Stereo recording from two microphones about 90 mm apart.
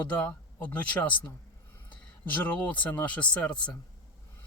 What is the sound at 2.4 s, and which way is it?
Speech, 15° left (ahead or behind).